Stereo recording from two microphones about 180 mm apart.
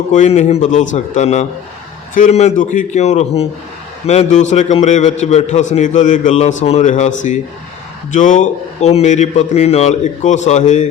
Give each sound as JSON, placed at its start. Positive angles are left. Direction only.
{"t": 0.1, "sound": "a man's voice", "side_deg": 40}
{"t": 8.1, "sound": "a man's voice", "side_deg": 45}